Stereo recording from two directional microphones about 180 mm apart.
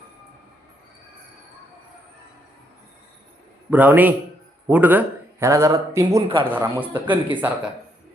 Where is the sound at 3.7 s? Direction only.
10° right (ahead or behind).